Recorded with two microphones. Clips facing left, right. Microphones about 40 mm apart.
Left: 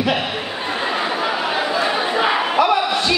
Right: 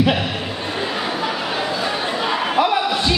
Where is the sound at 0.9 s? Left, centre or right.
Centre.